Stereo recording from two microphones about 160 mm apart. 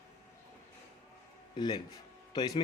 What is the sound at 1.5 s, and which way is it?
A man's voice, 30° left (ahead or behind).